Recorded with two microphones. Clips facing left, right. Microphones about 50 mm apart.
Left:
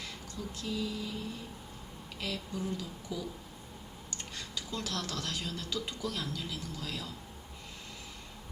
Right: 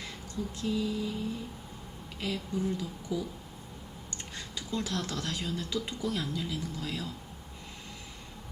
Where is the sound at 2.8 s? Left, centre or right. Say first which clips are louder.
Right 5 dB; centre.